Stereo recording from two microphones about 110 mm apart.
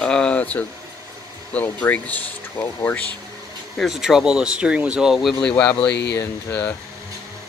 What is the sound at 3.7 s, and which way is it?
Speech, centre (ahead or behind).